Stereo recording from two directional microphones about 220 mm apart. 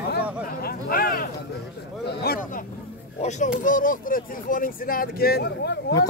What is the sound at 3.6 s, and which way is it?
Speech, 40° left (ahead or behind).